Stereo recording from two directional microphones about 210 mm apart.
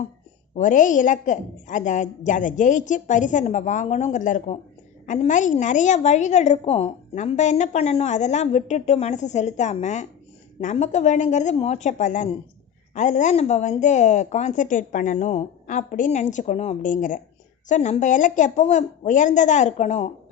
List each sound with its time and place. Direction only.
0.5 s a woman's voice: 35° left (ahead or behind)